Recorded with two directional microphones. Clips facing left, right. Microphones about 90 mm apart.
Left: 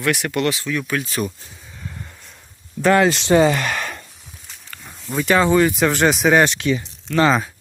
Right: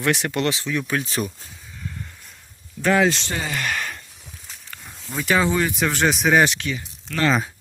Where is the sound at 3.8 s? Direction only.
90° left.